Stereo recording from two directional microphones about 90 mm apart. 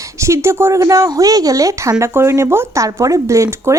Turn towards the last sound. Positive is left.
turn(degrees=-30)  # may be behind; listen again after turning